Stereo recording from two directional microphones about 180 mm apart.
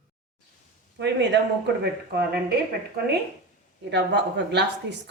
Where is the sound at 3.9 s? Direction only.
75° right (ahead or behind).